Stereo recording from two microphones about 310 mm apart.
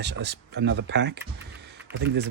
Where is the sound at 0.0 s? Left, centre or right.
Right.